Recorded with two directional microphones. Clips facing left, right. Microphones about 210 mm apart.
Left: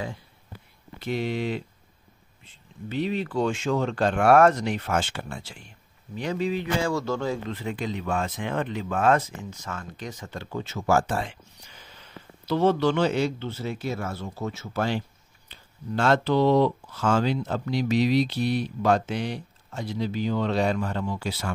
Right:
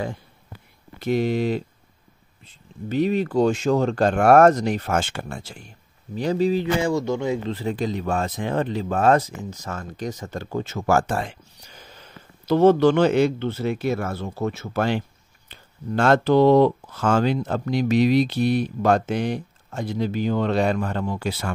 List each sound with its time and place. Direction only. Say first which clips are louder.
0.9 s speech: right 6 dB; 45° right (ahead or behind)
6.8 s speech: right 4 dB; 20° right (ahead or behind)
7.4 s speech: right 5 dB; 35° right (ahead or behind); by 21.5 s 55° right (ahead or behind)